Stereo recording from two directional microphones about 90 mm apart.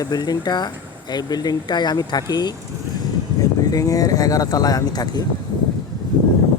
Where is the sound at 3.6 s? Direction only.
40° left (ahead or behind).